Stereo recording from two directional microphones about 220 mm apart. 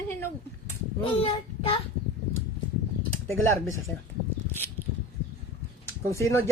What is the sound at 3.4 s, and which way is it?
Speech, 15° left (ahead or behind).